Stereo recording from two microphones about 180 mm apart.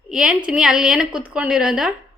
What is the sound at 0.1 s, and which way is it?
A woman's voice, 5° right (ahead or behind).